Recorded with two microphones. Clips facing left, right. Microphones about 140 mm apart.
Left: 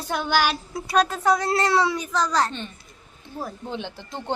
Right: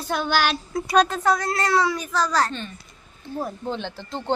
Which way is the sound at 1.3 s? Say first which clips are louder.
Left 1 dB; 25° left (ahead or behind).